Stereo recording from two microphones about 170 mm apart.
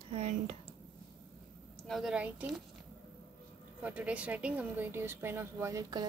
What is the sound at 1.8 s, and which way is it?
Speech, centre (ahead or behind).